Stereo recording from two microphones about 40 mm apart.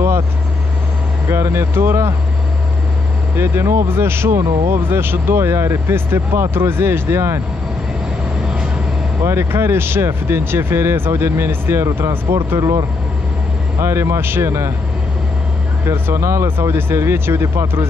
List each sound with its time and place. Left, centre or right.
1.3 s speech: right
3.3 s speech: right
9.2 s speech: right
13.7 s speech: right
16.1 s speech: right